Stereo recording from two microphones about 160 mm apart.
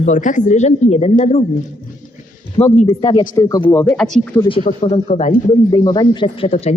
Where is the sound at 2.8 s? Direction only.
35° left (ahead or behind).